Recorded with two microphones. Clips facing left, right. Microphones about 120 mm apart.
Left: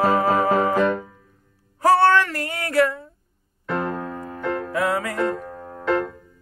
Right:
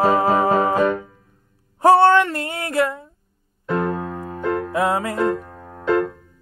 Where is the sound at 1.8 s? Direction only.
25° right (ahead or behind).